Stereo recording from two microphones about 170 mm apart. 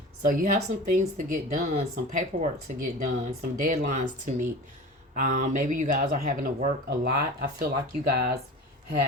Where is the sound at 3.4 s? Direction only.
60° right (ahead or behind).